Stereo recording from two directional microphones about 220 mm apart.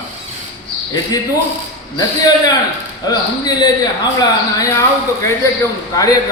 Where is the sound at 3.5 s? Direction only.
15° left (ahead or behind).